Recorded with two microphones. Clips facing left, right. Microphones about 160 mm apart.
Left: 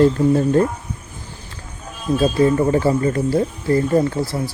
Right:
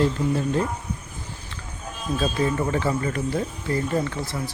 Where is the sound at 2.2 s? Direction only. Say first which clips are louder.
Left 8 dB; 35° left (ahead or behind).